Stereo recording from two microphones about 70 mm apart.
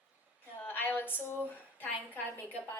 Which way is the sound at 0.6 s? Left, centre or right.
Left.